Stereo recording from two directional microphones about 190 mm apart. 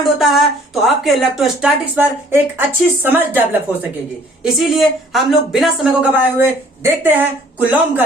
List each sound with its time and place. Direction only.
0.0 s speech: centre (ahead or behind)